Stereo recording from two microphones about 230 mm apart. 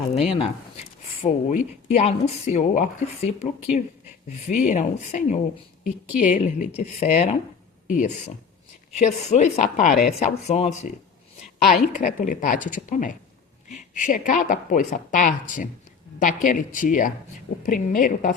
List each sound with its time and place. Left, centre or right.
0.1 s a woman's voice: left